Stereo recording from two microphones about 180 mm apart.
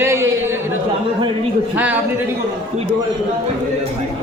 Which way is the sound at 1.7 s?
10° right (ahead or behind).